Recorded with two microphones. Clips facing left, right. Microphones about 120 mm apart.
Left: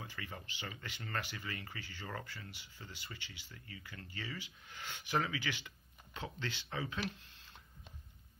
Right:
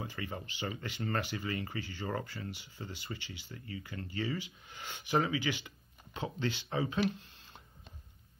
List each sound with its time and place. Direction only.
0.0 s speech: 30° right (ahead or behind)
2.5 s speech: 25° right (ahead or behind)
4.6 s speech: 15° right (ahead or behind)